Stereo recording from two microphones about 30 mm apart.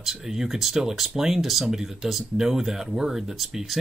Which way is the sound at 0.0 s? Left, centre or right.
Centre.